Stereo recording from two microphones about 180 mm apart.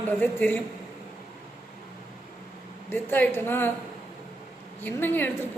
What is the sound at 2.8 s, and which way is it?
Speech, 10° left (ahead or behind).